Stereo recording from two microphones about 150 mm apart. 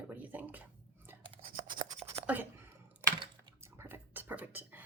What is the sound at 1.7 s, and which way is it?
Scratch, 65° right (ahead or behind).